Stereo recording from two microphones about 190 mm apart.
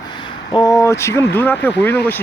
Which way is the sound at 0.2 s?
25° left (ahead or behind).